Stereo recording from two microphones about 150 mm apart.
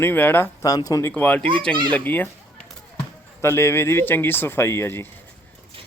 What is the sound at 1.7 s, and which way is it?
Speech, 35° right (ahead or behind).